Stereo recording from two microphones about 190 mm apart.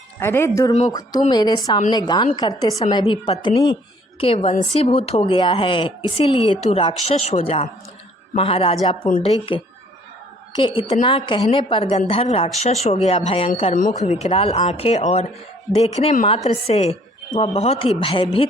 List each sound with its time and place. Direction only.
0.2 s a woman's voice: 15° left (ahead or behind)
4.2 s a woman's voice: 35° left (ahead or behind)
10.6 s a woman's voice: 25° left (ahead or behind)